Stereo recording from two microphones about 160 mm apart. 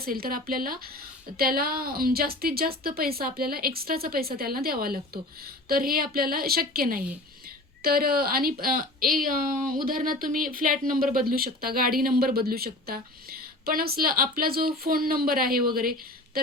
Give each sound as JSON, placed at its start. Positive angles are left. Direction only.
{"t": 0.0, "sound": "a woman's voice", "side_deg": -65}